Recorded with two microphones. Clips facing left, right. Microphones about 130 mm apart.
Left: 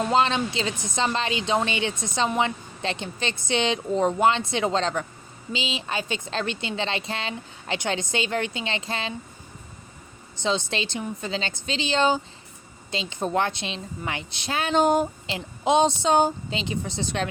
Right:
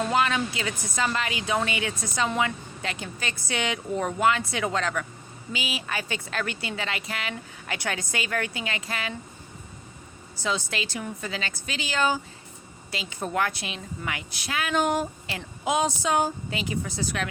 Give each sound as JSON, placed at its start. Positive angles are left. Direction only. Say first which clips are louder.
{"t": 0.0, "sound": "a woman's voice", "louder": "left 2 dB", "side_deg": 25}
{"t": 10.4, "sound": "a woman's voice", "louder": "left 3 dB", "side_deg": 25}